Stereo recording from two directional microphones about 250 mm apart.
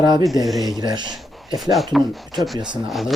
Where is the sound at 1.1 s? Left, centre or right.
Centre.